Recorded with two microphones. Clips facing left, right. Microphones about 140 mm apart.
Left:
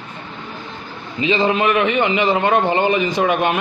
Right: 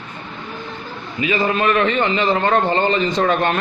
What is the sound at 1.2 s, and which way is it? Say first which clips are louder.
A man's voice: left 2 dB; 25° left (ahead or behind).